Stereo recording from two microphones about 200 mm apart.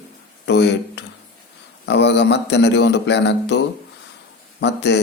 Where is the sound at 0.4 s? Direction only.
60° left (ahead or behind).